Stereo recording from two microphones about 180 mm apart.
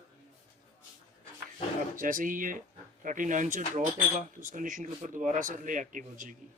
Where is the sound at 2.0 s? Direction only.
50° right (ahead or behind).